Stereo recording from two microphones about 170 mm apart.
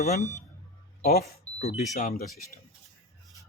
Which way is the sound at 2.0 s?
55° left (ahead or behind).